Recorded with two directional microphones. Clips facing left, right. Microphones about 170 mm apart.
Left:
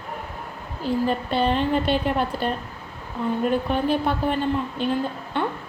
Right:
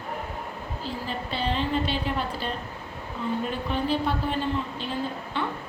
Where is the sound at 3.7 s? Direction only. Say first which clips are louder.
Left 4 dB; 55° left (ahead or behind).